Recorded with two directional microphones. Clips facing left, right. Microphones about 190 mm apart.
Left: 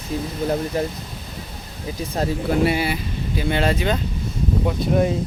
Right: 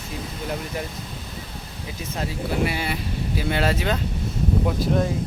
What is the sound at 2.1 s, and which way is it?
Speech, 35° left (ahead or behind).